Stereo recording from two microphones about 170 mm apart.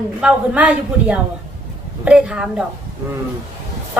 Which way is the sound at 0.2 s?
5° right (ahead or behind).